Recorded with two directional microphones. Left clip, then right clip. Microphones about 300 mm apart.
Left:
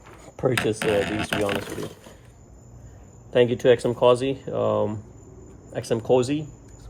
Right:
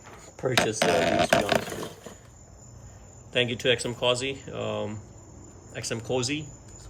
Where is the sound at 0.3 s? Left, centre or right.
Centre.